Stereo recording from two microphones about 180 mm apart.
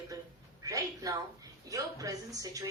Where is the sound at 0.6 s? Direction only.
20° right (ahead or behind).